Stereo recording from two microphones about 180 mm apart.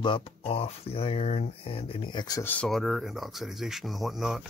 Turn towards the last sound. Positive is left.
turn(degrees=0)  # may be behind; listen again after turning